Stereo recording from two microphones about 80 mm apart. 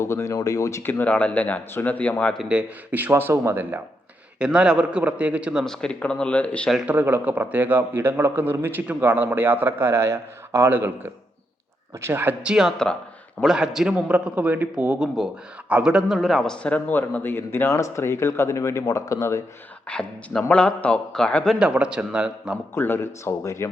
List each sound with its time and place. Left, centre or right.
0.0 s speech: left
0.8 s speech: left
2.4 s a man's voice: centre
4.4 s a man's voice: centre
5.6 s speech: centre
6.8 s a man's voice: right
12.4 s a man's voice: centre
12.7 s speech: centre
13.4 s a man's voice: centre
14.9 s a man's voice: centre
16.9 s speech: left
19.9 s speech: centre
21.6 s a man's voice: centre
22.7 s speech: left